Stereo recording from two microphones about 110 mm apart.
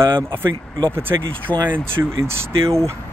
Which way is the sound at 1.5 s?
20° left (ahead or behind).